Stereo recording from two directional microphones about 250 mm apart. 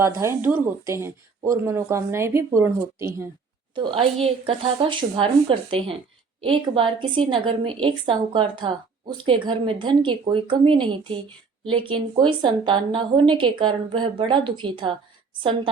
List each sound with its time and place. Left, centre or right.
0.0 s a woman's voice: centre
3.8 s a woman's voice: right